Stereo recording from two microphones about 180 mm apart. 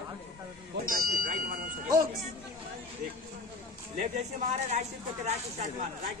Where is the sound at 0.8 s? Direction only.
50° right (ahead or behind).